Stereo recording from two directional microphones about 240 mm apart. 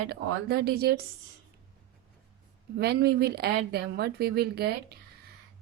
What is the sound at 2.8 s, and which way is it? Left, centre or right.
A woman's voice, right.